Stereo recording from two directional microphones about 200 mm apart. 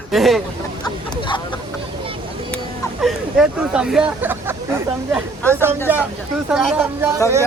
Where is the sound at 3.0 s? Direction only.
Centre (ahead or behind).